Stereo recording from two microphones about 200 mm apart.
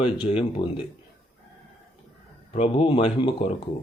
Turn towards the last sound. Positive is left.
turn(degrees=25)  # may be behind; listen again after turning